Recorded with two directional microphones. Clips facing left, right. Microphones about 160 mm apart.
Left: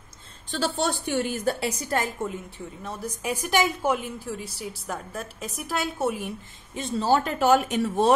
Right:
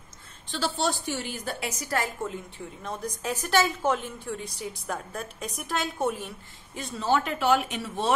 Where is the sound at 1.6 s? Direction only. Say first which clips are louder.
Left 3 dB; 30° left (ahead or behind).